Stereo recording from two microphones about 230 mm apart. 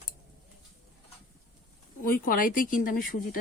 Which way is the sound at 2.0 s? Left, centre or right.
Left.